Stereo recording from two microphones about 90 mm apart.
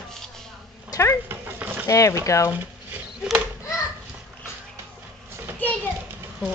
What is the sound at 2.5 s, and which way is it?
Rodents, 20° right (ahead or behind).